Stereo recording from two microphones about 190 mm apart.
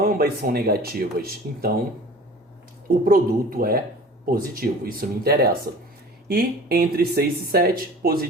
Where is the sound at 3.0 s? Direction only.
50° right (ahead or behind).